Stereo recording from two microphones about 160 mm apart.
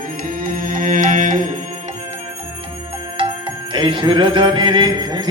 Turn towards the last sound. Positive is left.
turn(degrees=-25)  # may be behind; listen again after turning